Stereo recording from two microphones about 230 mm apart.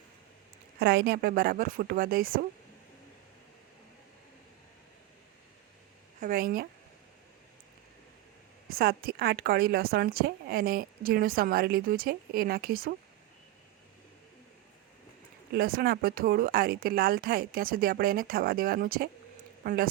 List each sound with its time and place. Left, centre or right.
0.8 s a woman's voice: right
6.1 s a woman's voice: right
8.7 s a woman's voice: right
15.5 s a woman's voice: right